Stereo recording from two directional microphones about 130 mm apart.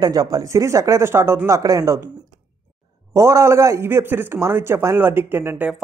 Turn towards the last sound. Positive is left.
turn(degrees=-10)  # may be behind; listen again after turning